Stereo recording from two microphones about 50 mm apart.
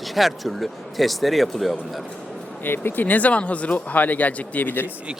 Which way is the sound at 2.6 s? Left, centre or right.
Left.